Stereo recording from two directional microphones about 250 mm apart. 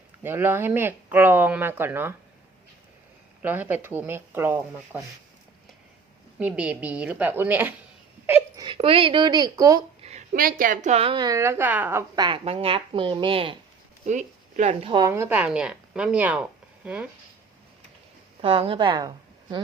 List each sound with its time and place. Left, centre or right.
0.2 s speech: centre
3.4 s speech: centre
6.4 s speech: centre
10.1 s a woman's voice: right; by 17.1 s centre
18.4 s a woman's voice: right